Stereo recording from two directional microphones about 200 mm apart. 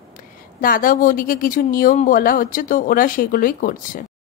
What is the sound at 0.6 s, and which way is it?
Speech, 45° left (ahead or behind).